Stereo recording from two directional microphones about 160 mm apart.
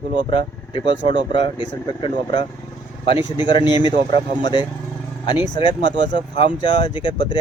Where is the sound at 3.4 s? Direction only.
30° left (ahead or behind).